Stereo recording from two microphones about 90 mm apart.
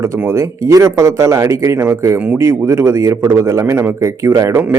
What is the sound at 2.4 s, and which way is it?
A man's voice, 30° right (ahead or behind).